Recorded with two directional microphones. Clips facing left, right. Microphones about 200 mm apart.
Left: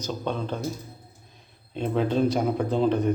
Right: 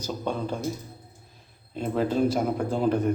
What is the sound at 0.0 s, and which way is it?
Speech, 10° right (ahead or behind).